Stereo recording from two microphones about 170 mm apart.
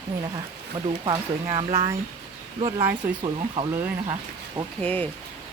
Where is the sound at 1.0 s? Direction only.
30° right (ahead or behind).